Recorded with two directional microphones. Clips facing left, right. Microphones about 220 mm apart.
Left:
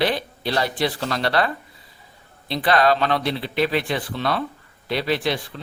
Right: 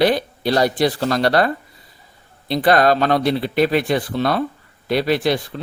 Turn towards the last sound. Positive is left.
turn(degrees=-40)  # may be behind; listen again after turning